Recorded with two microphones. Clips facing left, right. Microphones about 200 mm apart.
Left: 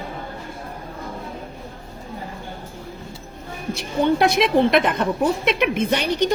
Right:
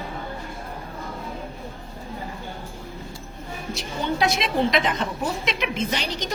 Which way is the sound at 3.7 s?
55° left (ahead or behind).